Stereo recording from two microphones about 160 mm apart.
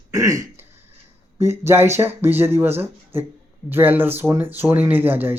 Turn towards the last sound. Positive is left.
turn(degrees=-10)  # may be behind; listen again after turning